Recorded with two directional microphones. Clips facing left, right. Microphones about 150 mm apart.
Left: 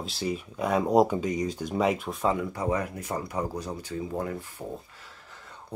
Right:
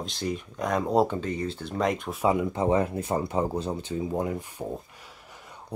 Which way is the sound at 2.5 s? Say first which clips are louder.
Right 5 dB; 25° right (ahead or behind).